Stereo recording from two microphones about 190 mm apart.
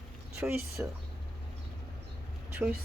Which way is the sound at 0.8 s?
10° right (ahead or behind).